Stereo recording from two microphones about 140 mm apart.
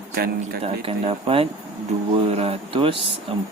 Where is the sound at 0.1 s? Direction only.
90° right.